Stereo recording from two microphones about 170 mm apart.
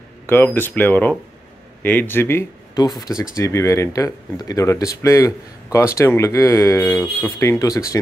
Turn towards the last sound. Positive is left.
turn(degrees=20)  # may be behind; listen again after turning